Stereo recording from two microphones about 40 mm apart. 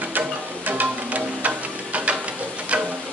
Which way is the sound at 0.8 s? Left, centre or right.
Right.